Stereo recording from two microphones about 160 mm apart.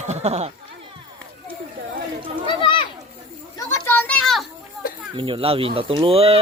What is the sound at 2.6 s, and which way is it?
Children playing, 30° left (ahead or behind).